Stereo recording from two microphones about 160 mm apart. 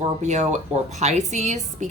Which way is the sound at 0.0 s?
45° right (ahead or behind).